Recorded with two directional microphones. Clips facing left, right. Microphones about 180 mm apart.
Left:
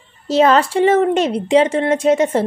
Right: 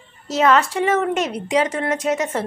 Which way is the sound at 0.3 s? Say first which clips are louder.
Left 4 dB; 30° left (ahead or behind).